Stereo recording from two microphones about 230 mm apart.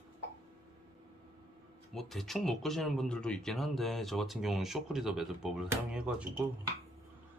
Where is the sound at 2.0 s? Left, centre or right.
Centre.